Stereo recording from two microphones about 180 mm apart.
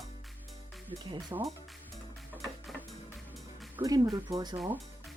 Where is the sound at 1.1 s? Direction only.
25° right (ahead or behind).